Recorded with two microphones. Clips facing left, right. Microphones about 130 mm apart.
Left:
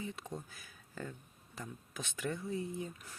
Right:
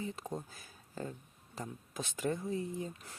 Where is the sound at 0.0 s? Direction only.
35° right (ahead or behind).